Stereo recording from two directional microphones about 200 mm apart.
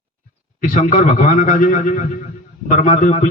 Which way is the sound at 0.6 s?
40° left (ahead or behind).